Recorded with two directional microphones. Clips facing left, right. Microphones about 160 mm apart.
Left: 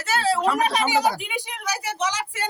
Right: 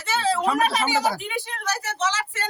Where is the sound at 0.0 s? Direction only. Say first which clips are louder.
Left 1 dB; 10° left (ahead or behind).